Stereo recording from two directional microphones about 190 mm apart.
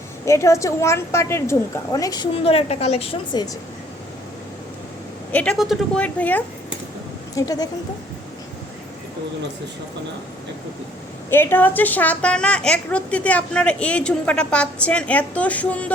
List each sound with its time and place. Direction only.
0.3 s a woman's voice: 15° left (ahead or behind)
5.3 s a woman's voice: 5° left (ahead or behind)
7.3 s speech: 20° left (ahead or behind)
11.3 s a woman's voice: 10° left (ahead or behind)